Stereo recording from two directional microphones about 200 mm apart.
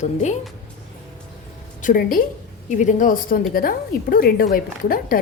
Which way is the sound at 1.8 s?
45° left (ahead or behind).